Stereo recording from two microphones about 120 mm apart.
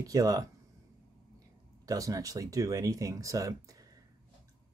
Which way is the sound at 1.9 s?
30° right (ahead or behind).